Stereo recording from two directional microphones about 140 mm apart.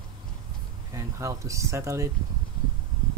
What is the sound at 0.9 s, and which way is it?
Speech, 20° right (ahead or behind).